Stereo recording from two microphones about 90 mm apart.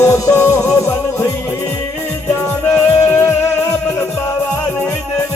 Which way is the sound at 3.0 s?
30° left (ahead or behind).